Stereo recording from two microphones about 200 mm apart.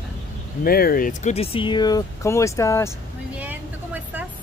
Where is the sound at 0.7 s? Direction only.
50° left (ahead or behind); by 2.9 s 15° left (ahead or behind).